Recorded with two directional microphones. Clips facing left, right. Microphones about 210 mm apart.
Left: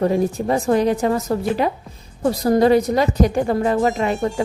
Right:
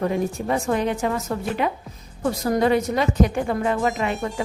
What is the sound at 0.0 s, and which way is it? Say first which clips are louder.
A woman's voice: left 5 dB; 35° left (ahead or behind).